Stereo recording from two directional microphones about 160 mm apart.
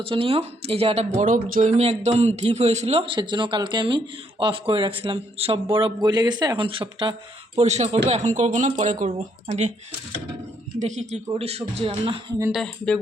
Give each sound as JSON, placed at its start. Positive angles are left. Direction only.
{"t": 0.0, "sound": "speech", "side_deg": -35}
{"t": 10.8, "sound": "speech", "side_deg": -45}
{"t": 12.5, "sound": "speech", "side_deg": 0}